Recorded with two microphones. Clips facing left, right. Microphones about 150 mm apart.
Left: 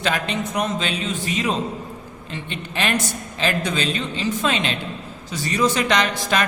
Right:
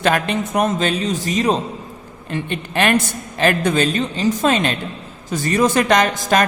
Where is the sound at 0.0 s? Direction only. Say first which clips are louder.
Right 5 dB; 50° right (ahead or behind).